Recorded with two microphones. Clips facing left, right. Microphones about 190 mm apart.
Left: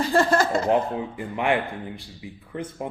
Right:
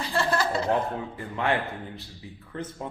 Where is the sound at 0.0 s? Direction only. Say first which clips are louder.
Left 6 dB; 45° left (ahead or behind).